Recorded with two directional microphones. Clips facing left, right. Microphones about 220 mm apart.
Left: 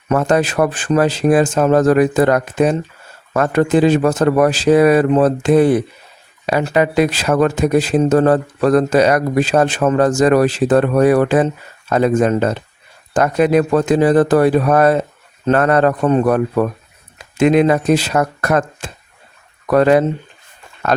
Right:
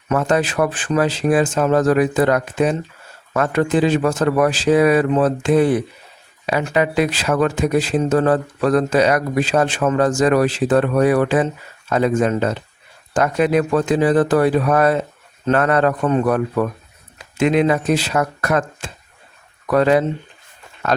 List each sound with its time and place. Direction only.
0.1 s speech: 40° left (ahead or behind)